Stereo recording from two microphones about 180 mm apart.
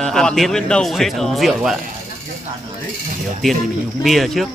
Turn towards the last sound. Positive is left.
turn(degrees=0)  # may be behind; listen again after turning